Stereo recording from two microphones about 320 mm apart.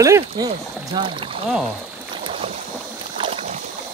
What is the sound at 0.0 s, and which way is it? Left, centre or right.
Speech, centre.